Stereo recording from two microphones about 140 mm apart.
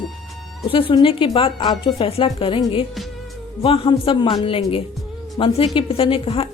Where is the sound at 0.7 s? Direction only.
40° left (ahead or behind).